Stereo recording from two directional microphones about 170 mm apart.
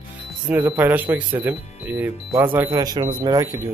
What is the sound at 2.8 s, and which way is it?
Speech, 20° right (ahead or behind).